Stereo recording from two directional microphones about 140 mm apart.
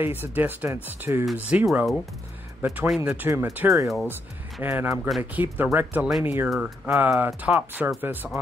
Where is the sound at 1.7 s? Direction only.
Centre (ahead or behind).